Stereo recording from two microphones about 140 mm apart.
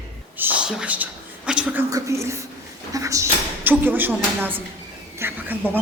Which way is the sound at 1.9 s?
20° right (ahead or behind).